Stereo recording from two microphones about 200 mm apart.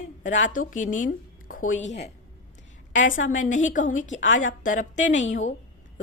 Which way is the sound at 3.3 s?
40° left (ahead or behind).